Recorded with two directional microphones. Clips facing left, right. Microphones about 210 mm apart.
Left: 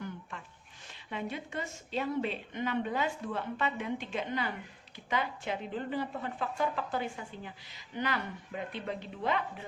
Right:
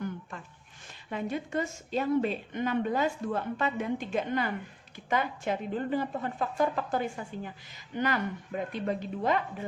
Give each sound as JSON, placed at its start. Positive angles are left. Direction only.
{"t": 1.1, "sound": "a woman's voice", "side_deg": -45}